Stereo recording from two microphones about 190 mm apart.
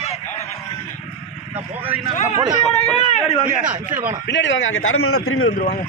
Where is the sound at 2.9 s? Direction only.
35° left (ahead or behind).